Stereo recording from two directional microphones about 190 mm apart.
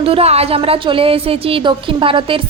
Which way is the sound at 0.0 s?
30° right (ahead or behind).